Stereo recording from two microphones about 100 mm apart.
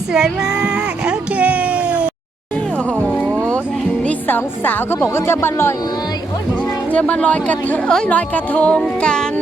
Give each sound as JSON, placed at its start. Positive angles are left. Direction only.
{"t": 0.1, "sound": "a sound", "side_deg": -5}
{"t": 4.0, "sound": "a woman's voice", "side_deg": 20}
{"t": 6.9, "sound": "speech", "side_deg": 15}